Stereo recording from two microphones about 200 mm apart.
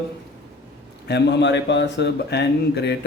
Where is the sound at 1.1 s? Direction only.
60° left (ahead or behind).